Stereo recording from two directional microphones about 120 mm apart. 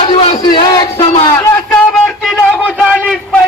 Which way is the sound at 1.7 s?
5° left (ahead or behind).